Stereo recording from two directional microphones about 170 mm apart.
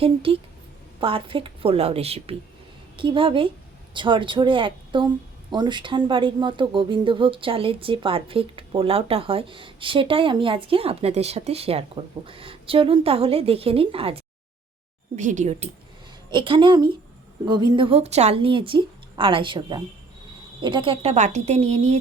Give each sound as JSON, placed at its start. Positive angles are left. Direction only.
{"t": 0.0, "sound": "a woman's voice", "side_deg": -35}
{"t": 15.1, "sound": "speech", "side_deg": -45}
{"t": 16.3, "sound": "a woman's voice", "side_deg": -30}